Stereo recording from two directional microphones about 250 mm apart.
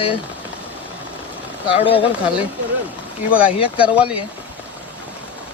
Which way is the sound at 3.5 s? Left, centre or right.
Left.